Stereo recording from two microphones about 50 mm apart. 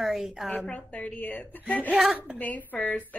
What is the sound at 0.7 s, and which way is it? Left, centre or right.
A woman's voice, left.